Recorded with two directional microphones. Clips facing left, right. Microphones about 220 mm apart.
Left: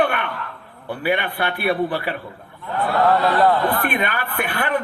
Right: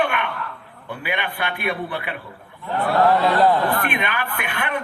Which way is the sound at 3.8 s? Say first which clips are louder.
Left 2 dB; 35° left (ahead or behind).